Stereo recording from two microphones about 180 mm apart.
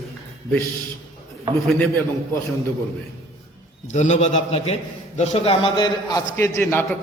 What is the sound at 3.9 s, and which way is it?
A man's voice, 40° left (ahead or behind).